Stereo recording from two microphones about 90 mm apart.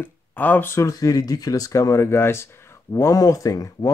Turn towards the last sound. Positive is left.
turn(degrees=40)  # may be behind; listen again after turning